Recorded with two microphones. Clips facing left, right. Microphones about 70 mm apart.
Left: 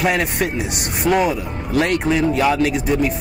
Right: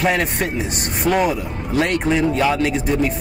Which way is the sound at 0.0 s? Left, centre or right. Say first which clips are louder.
Even; centre.